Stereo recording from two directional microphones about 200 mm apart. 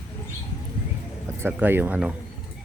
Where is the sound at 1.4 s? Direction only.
10° right (ahead or behind).